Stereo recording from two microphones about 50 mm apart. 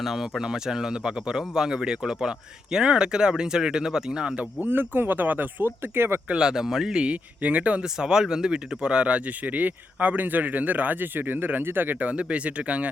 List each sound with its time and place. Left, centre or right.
0.0 s speech: centre
4.6 s speech: right
5.9 s speech: right
6.2 s speech: centre
7.0 s speech: right
7.9 s speech: centre